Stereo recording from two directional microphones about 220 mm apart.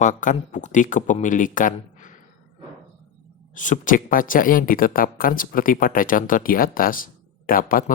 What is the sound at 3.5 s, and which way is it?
Speech, 35° left (ahead or behind).